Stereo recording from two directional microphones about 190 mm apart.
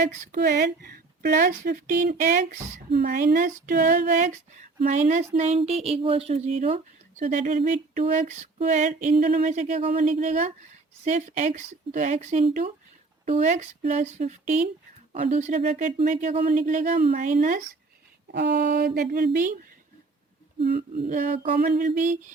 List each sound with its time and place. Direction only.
0.0 s speech: 50° right (ahead or behind)
18.3 s speech: 65° right (ahead or behind)
21.1 s speech: 45° right (ahead or behind)